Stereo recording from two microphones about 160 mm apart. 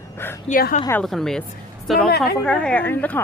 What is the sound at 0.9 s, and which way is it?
A woman's voice, 5° left (ahead or behind).